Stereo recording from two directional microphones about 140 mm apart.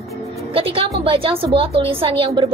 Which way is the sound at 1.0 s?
40° right (ahead or behind).